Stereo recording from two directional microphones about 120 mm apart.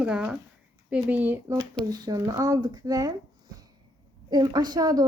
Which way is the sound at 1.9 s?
30° right (ahead or behind).